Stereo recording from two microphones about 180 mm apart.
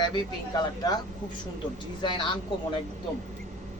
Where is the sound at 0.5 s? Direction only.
20° left (ahead or behind).